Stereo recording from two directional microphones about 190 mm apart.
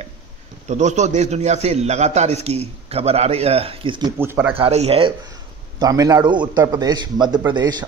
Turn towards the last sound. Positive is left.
turn(degrees=-20)  # may be behind; listen again after turning